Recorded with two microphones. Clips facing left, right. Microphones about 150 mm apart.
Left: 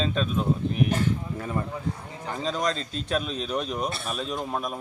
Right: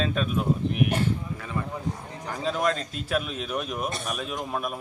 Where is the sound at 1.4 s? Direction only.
40° left (ahead or behind).